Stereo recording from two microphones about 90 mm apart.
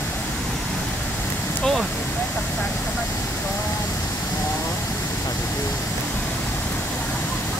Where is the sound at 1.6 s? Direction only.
Centre (ahead or behind).